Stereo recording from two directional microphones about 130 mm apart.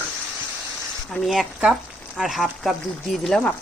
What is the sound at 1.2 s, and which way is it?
A woman's voice, 5° right (ahead or behind).